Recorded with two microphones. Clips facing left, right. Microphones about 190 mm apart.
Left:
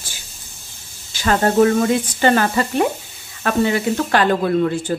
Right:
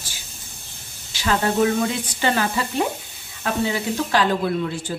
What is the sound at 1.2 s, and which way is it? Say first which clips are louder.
A woman's voice: left 5 dB; 50° left (ahead or behind).